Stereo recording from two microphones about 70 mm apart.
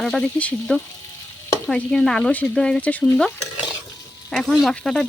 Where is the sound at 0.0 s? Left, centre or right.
Centre.